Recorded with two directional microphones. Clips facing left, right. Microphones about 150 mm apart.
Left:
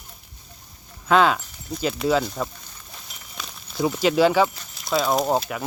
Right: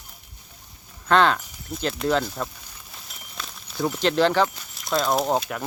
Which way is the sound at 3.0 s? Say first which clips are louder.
Even; centre (ahead or behind).